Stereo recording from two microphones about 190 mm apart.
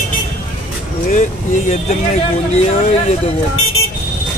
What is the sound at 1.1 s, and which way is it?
Speech, 40° left (ahead or behind).